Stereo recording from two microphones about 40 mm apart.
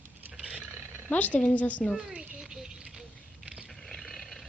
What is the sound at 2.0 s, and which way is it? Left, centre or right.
Speech, right.